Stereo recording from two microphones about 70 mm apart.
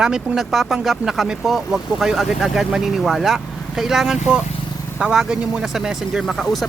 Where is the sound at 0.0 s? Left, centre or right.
Centre.